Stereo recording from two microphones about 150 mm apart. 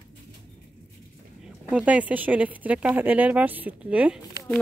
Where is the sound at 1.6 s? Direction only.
10° right (ahead or behind).